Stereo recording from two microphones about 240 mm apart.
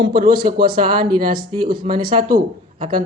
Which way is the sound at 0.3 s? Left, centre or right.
Right.